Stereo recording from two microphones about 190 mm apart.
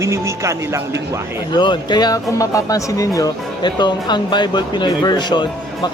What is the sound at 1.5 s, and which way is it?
Speech, 25° left (ahead or behind).